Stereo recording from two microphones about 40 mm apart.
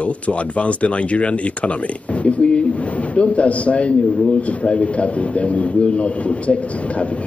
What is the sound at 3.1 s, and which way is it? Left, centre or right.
Speech, left.